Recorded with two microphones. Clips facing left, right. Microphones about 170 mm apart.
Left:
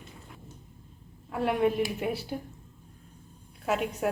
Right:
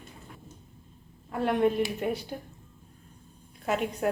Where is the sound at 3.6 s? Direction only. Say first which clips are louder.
Even; centre (ahead or behind).